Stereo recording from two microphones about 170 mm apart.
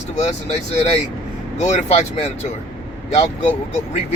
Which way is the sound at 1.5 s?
40° left (ahead or behind).